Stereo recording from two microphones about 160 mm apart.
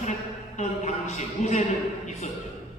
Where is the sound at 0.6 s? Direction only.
45° left (ahead or behind).